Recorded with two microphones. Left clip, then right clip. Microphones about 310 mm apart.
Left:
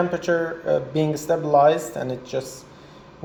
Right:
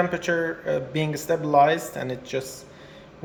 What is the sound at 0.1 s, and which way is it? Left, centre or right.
Speech, centre.